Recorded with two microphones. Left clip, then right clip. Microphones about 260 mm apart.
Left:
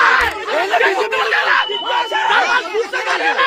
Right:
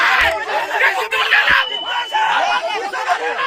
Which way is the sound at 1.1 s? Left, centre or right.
Centre.